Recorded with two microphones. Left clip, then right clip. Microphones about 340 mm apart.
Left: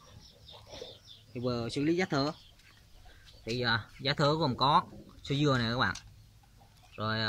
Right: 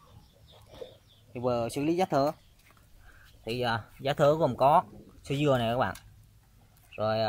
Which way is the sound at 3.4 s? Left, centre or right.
Centre.